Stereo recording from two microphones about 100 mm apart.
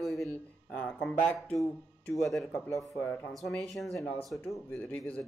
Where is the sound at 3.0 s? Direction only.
20° left (ahead or behind).